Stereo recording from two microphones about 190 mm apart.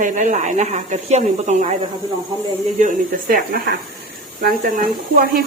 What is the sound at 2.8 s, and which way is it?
A woman's voice, 45° right (ahead or behind).